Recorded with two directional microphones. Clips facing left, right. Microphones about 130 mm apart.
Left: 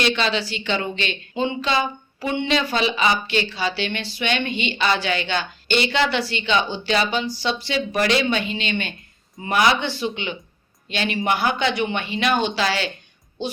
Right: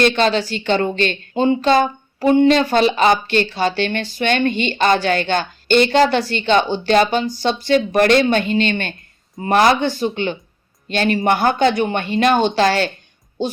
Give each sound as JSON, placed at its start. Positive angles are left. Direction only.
{"t": 0.0, "sound": "speech", "side_deg": -45}